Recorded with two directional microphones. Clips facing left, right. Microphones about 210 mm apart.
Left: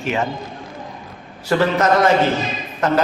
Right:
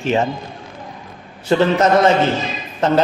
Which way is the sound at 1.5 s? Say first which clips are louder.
Right 2 dB; 25° right (ahead or behind).